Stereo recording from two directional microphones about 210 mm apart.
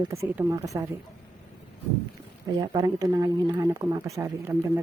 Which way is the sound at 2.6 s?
20° right (ahead or behind).